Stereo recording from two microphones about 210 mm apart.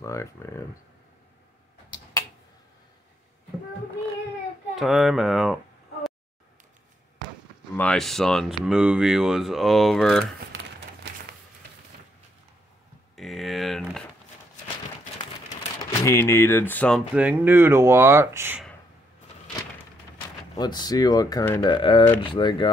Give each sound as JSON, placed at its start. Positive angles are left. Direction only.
{"t": 0.0, "sound": "speech", "side_deg": 15}
{"t": 4.7, "sound": "speech", "side_deg": 0}
{"t": 7.7, "sound": "speech", "side_deg": 5}
{"t": 13.1, "sound": "a sound", "side_deg": 0}
{"t": 15.8, "sound": "speech", "side_deg": 15}
{"t": 17.1, "sound": "speech", "side_deg": -5}
{"t": 20.5, "sound": "speech", "side_deg": 20}